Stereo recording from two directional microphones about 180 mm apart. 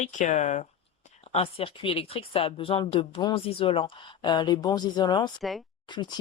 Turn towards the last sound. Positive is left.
turn(degrees=25)  # may be behind; listen again after turning